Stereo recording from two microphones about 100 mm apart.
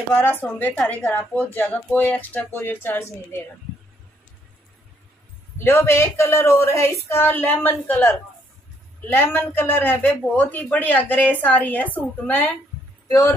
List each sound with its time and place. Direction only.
0.1 s speech: 20° left (ahead or behind)
5.6 s a woman's voice: 25° left (ahead or behind)